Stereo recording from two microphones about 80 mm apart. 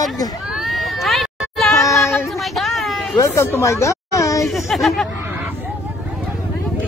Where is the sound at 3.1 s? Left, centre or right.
Left.